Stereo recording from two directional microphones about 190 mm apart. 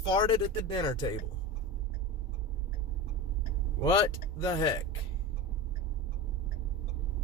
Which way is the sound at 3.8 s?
20° left (ahead or behind).